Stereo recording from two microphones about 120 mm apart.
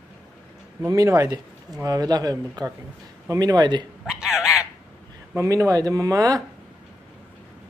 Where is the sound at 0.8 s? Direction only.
25° right (ahead or behind).